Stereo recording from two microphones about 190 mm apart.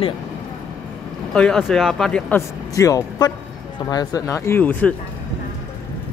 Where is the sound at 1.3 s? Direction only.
5° left (ahead or behind).